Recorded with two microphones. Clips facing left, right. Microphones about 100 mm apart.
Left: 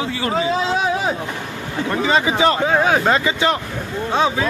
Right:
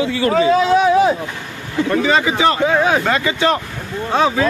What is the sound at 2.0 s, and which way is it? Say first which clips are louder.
Speech: left 1 dB; 25° left (ahead or behind).